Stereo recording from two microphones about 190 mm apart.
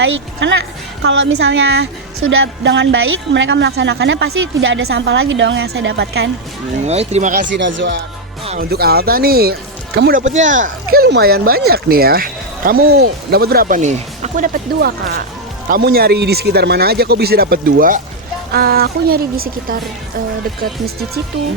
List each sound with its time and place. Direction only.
0.0 s a woman's voice: 70° right (ahead or behind)
6.8 s speech: 35° right (ahead or behind)
7.4 s a woman's voice: 75° right (ahead or behind)
8.7 s speech: 55° right (ahead or behind)